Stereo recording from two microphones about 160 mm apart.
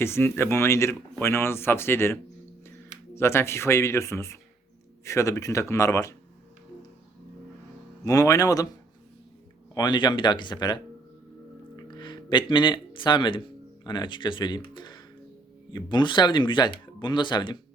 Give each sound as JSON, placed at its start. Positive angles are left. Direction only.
{"t": 0.0, "sound": "speech", "side_deg": 15}
{"t": 3.2, "sound": "speech", "side_deg": 15}
{"t": 8.0, "sound": "speech", "side_deg": 20}
{"t": 9.7, "sound": "speech", "side_deg": 30}
{"t": 11.9, "sound": "speech", "side_deg": 30}
{"t": 14.8, "sound": "music", "side_deg": 30}
{"t": 15.7, "sound": "speech", "side_deg": 30}